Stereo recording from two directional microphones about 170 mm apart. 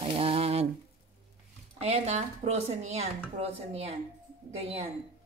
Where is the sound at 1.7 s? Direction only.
40° right (ahead or behind).